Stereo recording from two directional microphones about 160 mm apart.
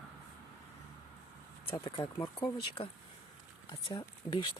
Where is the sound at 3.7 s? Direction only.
30° left (ahead or behind).